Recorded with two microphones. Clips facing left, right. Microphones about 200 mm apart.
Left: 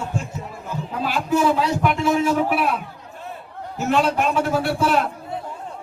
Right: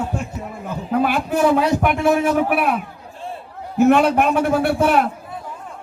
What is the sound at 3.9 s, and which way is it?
A man's voice, 60° right (ahead or behind).